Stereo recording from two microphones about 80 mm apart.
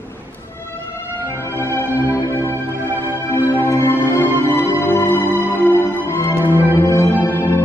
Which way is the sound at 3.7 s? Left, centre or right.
Left.